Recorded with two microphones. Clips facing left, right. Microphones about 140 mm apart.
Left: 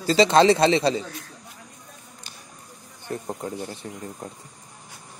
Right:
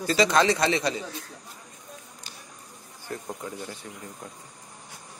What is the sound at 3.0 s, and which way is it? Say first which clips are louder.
Speech: left 4 dB; 25° left (ahead or behind).